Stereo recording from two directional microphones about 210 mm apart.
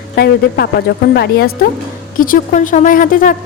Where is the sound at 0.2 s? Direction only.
50° left (ahead or behind).